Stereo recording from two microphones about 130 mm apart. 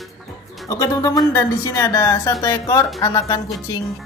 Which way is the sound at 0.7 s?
30° left (ahead or behind).